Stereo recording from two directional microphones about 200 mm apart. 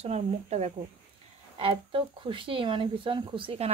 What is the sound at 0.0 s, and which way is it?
Speech, 30° right (ahead or behind).